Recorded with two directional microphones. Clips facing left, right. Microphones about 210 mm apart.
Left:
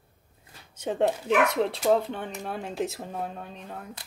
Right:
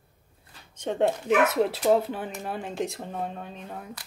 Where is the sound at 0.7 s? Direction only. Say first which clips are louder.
Right 1 dB; 5° left (ahead or behind).